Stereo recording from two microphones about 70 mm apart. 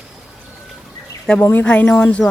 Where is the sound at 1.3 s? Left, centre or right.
Centre.